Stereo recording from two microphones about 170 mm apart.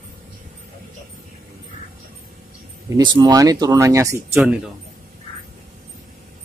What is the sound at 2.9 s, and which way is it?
Speech, 25° right (ahead or behind).